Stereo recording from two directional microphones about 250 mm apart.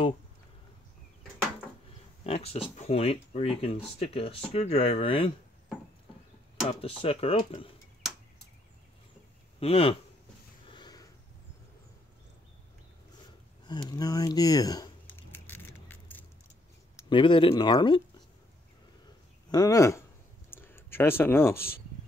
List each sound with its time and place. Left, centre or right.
2.2 s speech: left
6.8 s speech: left
9.6 s a man's voice: left
10.7 s sniff: centre
13.7 s a sound: centre
16.9 s speech: centre
19.5 s speech: centre
20.4 s a sound: centre